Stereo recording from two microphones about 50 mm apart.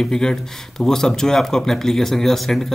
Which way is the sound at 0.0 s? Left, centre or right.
Centre.